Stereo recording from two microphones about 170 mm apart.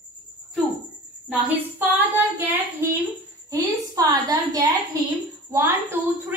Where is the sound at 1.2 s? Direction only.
10° right (ahead or behind).